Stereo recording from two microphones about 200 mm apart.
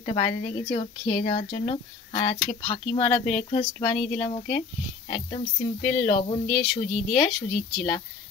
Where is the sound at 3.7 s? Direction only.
20° left (ahead or behind).